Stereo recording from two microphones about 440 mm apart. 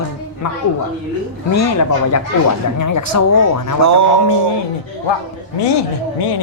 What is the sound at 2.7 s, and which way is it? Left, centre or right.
Speech, left.